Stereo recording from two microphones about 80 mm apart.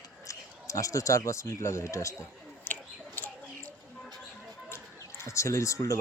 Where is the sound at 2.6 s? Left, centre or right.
Left.